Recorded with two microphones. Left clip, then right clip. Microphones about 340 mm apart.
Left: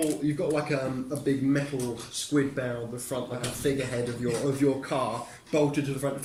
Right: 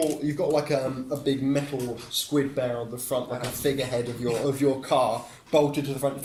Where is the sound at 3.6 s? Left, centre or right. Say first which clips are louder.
Right 2 dB; centre.